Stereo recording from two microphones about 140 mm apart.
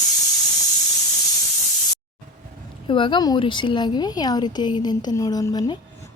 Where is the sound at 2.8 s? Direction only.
35° left (ahead or behind).